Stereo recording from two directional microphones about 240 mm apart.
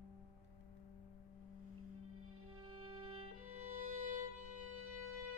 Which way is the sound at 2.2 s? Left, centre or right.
Right.